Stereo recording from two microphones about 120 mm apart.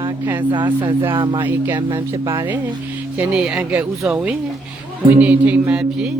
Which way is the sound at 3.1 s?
10° right (ahead or behind).